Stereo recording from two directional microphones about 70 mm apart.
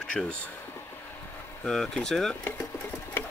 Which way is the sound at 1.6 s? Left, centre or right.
Centre.